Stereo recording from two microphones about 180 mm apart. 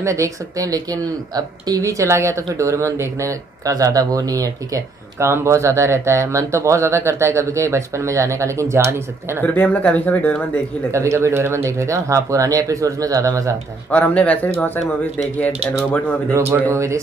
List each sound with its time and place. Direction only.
0.0 s speech: 15° right (ahead or behind)
9.4 s speech: 10° left (ahead or behind)
10.9 s speech: 15° right (ahead or behind)
13.8 s speech: 10° left (ahead or behind)
15.9 s speech: 10° left (ahead or behind)
16.3 s speech: 10° right (ahead or behind)